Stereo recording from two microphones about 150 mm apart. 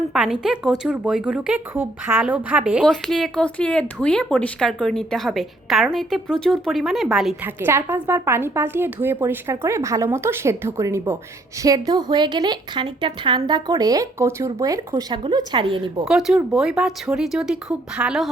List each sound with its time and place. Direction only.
0.1 s a woman's voice: 5° right (ahead or behind)
2.8 s a woman's voice: 5° left (ahead or behind)
7.4 s a woman's voice: 15° right (ahead or behind); by 16.0 s 30° right (ahead or behind)
16.0 s a woman's voice: 5° right (ahead or behind)